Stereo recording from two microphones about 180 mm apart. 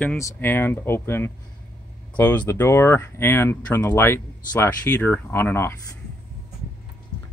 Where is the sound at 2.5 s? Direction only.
15° left (ahead or behind).